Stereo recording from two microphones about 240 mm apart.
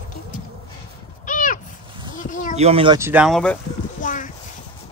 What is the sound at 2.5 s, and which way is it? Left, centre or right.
Speech, right.